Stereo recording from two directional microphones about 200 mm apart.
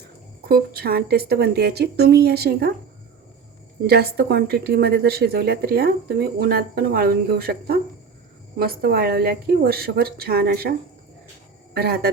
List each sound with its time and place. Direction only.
0.4 s speech: 50° right (ahead or behind)
3.8 s speech: 50° right (ahead or behind)